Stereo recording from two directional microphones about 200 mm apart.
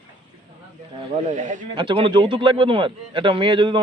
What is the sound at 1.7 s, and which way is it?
A man's voice, 25° right (ahead or behind).